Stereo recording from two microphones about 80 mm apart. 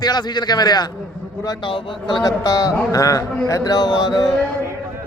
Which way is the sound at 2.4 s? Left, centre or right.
Left.